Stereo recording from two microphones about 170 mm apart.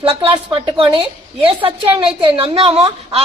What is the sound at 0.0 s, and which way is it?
A woman's voice, 30° right (ahead or behind).